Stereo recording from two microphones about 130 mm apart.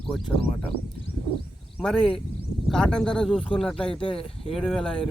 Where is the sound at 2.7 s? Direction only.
5° left (ahead or behind).